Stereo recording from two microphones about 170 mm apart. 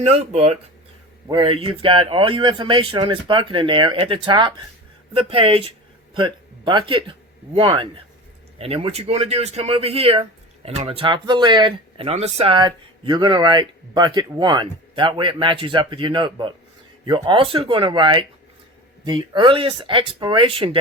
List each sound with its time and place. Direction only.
0.0 s speech: 40° right (ahead or behind)